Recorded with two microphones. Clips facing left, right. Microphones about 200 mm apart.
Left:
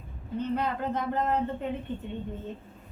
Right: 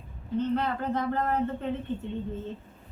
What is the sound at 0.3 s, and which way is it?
Speech, 15° left (ahead or behind).